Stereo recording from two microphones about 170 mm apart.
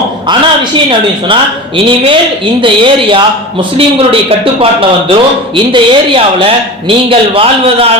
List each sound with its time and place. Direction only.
0.9 s a man's voice: 30° right (ahead or behind)